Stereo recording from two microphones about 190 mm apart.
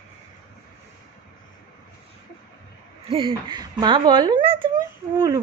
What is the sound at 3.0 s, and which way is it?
Speech, 30° right (ahead or behind).